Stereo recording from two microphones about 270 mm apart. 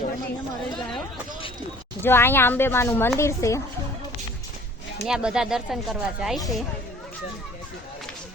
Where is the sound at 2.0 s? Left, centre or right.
Centre.